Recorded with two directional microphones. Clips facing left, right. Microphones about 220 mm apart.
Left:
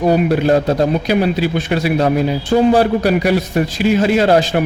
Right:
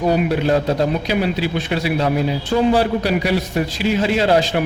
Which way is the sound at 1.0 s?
50° left (ahead or behind).